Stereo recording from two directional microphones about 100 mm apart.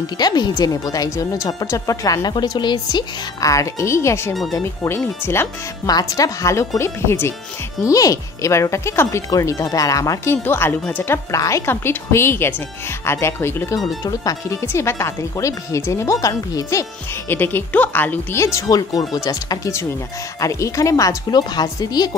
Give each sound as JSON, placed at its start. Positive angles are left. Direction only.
{"t": 0.2, "sound": "speech", "side_deg": 45}
{"t": 2.3, "sound": "speech", "side_deg": 45}
{"t": 5.9, "sound": "speech", "side_deg": 40}
{"t": 10.3, "sound": "speech", "side_deg": 20}
{"t": 11.3, "sound": "speech", "side_deg": 30}
{"t": 13.7, "sound": "speech", "side_deg": 40}
{"t": 17.3, "sound": "speech", "side_deg": 20}
{"t": 18.4, "sound": "speech", "side_deg": 35}